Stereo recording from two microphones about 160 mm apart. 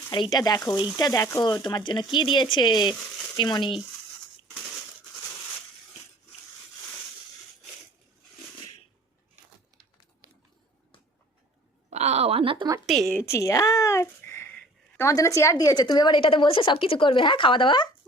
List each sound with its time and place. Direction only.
0.1 s speech: 25° left (ahead or behind)
11.9 s a sound: 45° right (ahead or behind)
12.8 s a woman's voice: centre (ahead or behind)
13.1 s speech: 15° left (ahead or behind)